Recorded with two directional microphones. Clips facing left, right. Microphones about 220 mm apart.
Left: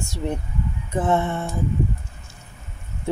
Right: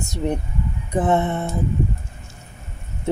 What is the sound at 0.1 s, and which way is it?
Speech, 20° right (ahead or behind).